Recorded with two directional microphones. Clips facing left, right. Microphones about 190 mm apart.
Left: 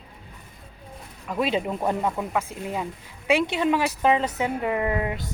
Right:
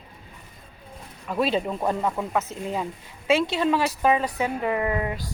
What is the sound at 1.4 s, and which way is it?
A woman's voice, 10° left (ahead or behind).